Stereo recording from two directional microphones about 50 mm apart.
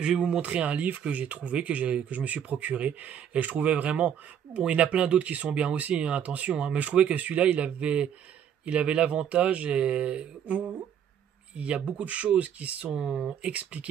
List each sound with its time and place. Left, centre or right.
0.0 s speech: centre
0.4 s speech: right
12.9 s speech: centre